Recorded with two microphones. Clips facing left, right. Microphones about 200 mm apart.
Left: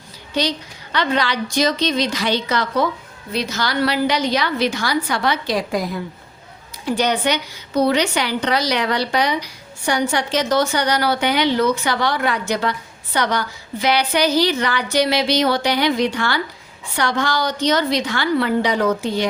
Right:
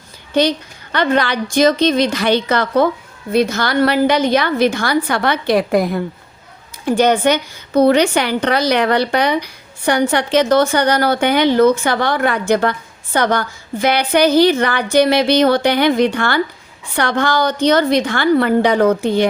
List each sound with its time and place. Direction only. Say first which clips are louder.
0.4 s a woman's voice: right 7 dB; 55° right (ahead or behind)